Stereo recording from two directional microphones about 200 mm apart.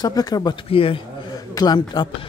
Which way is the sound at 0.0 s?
20° left (ahead or behind).